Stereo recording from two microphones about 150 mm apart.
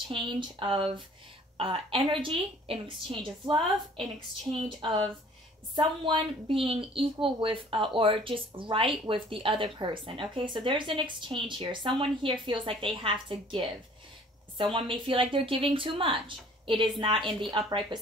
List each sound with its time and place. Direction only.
0.1 s a woman's voice: 30° right (ahead or behind)
14.6 s a woman's voice: 35° right (ahead or behind)